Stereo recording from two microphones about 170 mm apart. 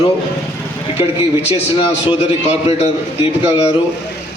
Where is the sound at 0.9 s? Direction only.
10° right (ahead or behind).